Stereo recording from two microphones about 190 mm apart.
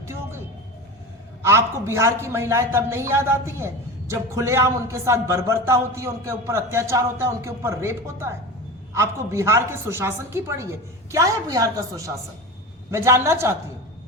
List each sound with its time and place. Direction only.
1.4 s speech: 15° right (ahead or behind)